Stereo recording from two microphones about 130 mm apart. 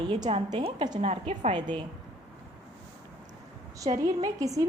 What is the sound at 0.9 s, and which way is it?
Speech, 50° right (ahead or behind).